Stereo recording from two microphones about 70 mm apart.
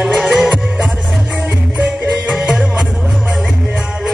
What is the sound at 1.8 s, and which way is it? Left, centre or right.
Music, centre.